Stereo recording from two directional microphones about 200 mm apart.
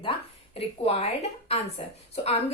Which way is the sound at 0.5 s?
30° left (ahead or behind).